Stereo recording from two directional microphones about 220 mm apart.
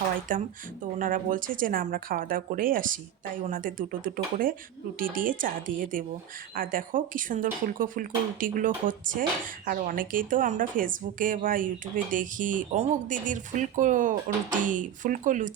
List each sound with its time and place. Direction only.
0.3 s speech: 40° right (ahead or behind)